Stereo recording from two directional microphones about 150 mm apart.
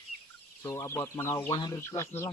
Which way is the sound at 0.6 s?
20° left (ahead or behind).